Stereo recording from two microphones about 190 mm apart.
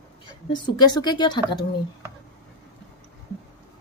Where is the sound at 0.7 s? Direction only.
20° left (ahead or behind).